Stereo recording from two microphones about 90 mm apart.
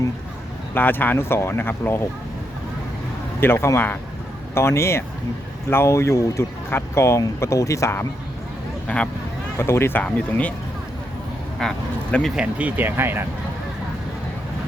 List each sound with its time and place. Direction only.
0.7 s speech: 20° left (ahead or behind)
3.4 s speech: 25° left (ahead or behind)
9.6 s speech: 30° left (ahead or behind)
10.0 s speech: 15° left (ahead or behind)
11.6 s speech: 5° left (ahead or behind)
12.4 s speech: 15° right (ahead or behind)